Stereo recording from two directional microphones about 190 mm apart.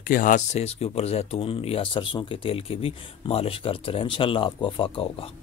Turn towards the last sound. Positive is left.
turn(degrees=30)  # may be behind; listen again after turning